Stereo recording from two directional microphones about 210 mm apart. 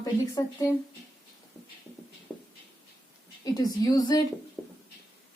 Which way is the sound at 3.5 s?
20° left (ahead or behind).